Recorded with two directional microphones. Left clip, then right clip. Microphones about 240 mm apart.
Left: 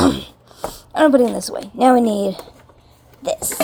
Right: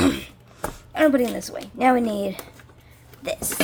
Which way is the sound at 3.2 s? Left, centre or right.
Centre.